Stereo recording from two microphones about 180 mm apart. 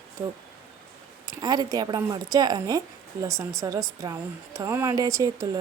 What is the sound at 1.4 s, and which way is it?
Speech, 20° right (ahead or behind).